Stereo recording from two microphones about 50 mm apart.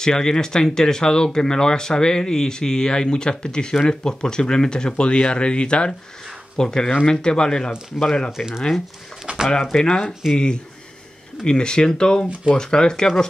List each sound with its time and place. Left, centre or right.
0.0 s speech: centre
9.2 s a sound: centre
9.5 s speech: centre